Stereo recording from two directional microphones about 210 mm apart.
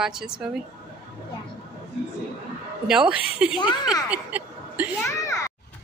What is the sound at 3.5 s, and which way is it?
Speech, 20° left (ahead or behind).